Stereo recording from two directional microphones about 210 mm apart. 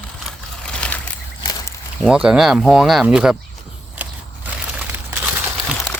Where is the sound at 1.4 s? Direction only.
20° left (ahead or behind).